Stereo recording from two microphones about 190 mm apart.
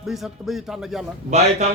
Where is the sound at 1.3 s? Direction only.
35° right (ahead or behind).